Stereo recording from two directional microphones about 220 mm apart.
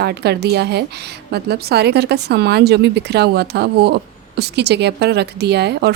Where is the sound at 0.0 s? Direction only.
50° right (ahead or behind).